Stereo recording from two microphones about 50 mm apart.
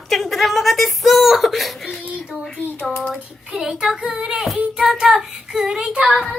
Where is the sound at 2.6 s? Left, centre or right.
Left.